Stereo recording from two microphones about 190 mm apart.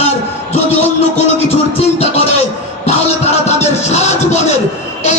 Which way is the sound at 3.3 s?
35° left (ahead or behind).